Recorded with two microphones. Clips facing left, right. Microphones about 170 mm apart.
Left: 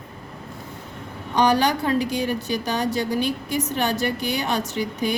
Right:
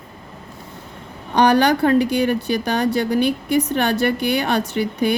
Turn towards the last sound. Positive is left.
turn(degrees=-60)  # may be behind; listen again after turning